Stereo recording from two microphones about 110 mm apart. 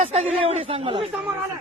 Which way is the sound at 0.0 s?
90° right.